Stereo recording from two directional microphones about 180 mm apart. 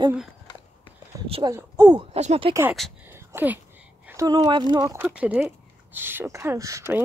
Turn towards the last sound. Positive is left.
turn(degrees=-15)  # may be behind; listen again after turning